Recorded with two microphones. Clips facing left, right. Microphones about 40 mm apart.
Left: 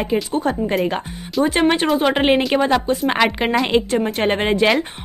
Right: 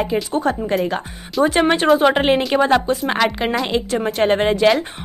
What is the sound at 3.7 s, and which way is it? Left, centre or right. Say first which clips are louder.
Speech: left 4 dB; left.